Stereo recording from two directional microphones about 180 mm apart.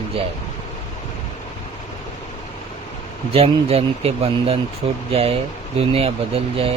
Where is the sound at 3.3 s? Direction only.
35° right (ahead or behind).